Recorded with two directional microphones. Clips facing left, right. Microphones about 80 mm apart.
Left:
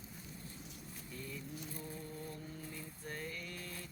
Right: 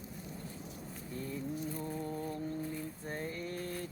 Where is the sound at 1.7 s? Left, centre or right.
Right.